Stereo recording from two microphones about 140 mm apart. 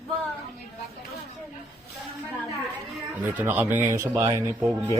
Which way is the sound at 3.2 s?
10° right (ahead or behind).